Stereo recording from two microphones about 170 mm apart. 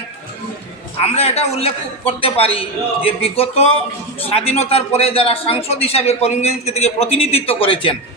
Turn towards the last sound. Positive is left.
turn(degrees=30)  # may be behind; listen again after turning